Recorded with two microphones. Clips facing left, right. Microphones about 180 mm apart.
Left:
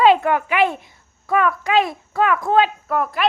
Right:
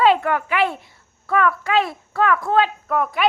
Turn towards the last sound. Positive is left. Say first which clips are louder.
# even
turn(degrees=0)  # may be behind; listen again after turning